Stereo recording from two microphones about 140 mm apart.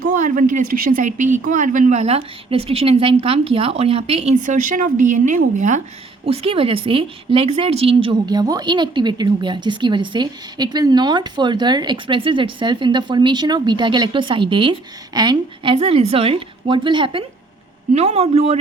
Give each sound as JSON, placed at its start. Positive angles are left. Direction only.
{"t": 0.0, "sound": "speech", "side_deg": -65}
{"t": 6.2, "sound": "a woman's voice", "side_deg": -45}
{"t": 17.9, "sound": "speech", "side_deg": -50}